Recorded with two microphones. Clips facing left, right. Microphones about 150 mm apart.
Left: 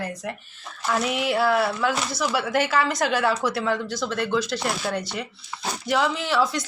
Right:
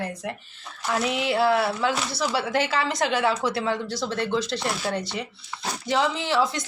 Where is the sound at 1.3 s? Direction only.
25° right (ahead or behind).